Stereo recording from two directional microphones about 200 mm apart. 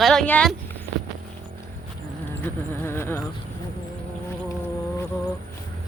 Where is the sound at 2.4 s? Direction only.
10° left (ahead or behind).